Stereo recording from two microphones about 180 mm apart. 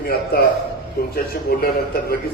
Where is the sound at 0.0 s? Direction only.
55° left (ahead or behind).